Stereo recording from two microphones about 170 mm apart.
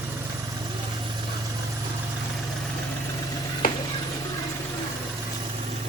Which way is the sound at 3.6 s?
55° left (ahead or behind).